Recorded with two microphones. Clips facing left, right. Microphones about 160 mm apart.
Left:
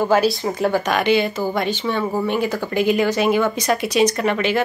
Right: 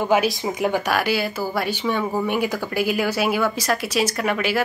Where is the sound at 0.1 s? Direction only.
15° right (ahead or behind).